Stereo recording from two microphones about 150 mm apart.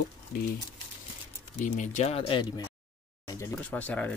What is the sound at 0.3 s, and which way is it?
Speech, 75° left (ahead or behind).